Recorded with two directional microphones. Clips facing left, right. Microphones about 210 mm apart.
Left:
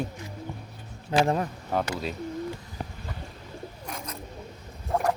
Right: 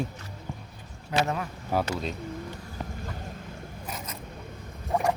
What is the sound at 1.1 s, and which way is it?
Speech, 30° left (ahead or behind).